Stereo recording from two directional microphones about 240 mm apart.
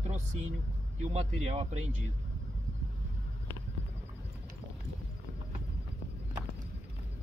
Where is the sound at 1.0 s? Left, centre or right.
Right.